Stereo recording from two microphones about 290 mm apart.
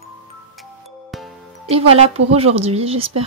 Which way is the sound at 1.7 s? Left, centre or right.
Centre.